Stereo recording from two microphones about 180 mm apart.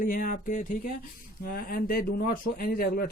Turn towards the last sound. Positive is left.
turn(degrees=55)  # may be behind; listen again after turning